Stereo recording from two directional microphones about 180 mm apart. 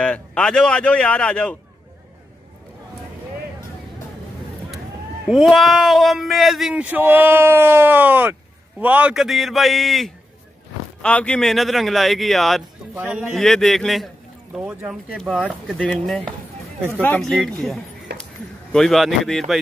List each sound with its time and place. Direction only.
0.0 s speech: 5° left (ahead or behind)
5.3 s speech: centre (ahead or behind)
18.1 s a sound: 65° right (ahead or behind)
18.7 s speech: centre (ahead or behind)